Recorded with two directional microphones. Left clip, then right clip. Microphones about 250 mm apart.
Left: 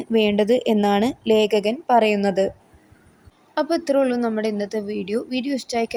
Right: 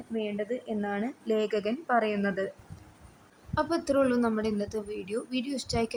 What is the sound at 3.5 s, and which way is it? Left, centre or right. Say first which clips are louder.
A woman's voice: left 7 dB; centre.